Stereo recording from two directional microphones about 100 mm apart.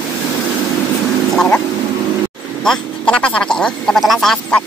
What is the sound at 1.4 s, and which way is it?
Vehicle, 10° left (ahead or behind).